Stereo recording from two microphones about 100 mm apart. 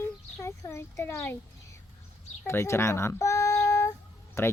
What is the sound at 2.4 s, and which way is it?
A child's voice, 25° left (ahead or behind).